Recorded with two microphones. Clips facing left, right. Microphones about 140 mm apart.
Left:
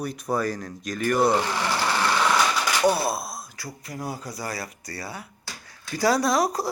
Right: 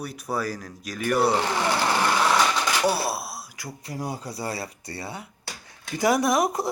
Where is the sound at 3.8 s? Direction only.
30° right (ahead or behind).